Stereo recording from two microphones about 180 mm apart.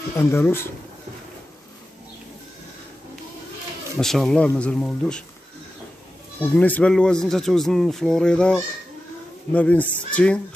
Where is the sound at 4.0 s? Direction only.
Centre (ahead or behind).